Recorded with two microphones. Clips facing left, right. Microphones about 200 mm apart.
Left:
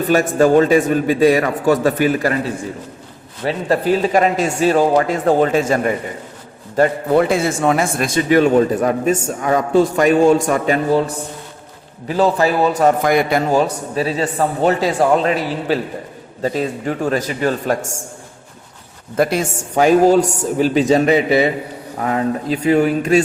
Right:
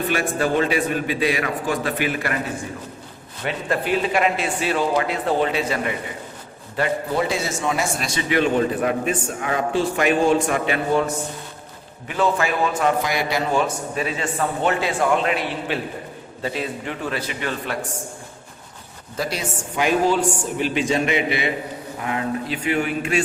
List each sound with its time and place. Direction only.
0.1 s speech: 45° left (ahead or behind)
3.4 s speech: 35° left (ahead or behind)
7.1 s a man's voice: 55° left (ahead or behind)
19.1 s a man's voice: 55° left (ahead or behind); by 23.2 s 40° left (ahead or behind)